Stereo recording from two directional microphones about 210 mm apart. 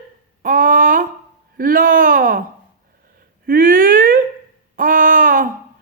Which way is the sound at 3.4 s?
40° right (ahead or behind).